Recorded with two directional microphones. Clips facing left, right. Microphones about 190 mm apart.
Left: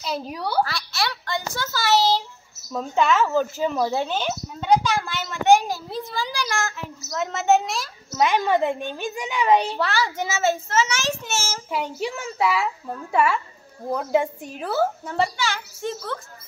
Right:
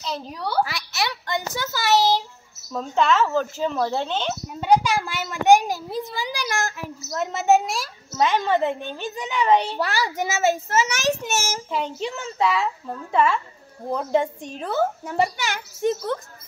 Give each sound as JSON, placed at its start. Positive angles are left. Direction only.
{"t": 0.0, "sound": "a child's voice", "side_deg": 5}
{"t": 0.7, "sound": "a sound", "side_deg": -20}
{"t": 2.7, "sound": "a child's voice", "side_deg": 5}
{"t": 4.6, "sound": "a child's voice", "side_deg": -10}
{"t": 8.2, "sound": "a child's voice", "side_deg": 15}
{"t": 9.8, "sound": "a child's voice", "side_deg": -15}
{"t": 11.7, "sound": "a child's voice", "side_deg": 10}
{"t": 15.0, "sound": "a child's voice", "side_deg": -15}